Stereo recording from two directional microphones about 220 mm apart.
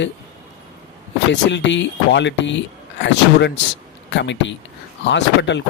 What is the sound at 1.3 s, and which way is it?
Speech, 55° left (ahead or behind).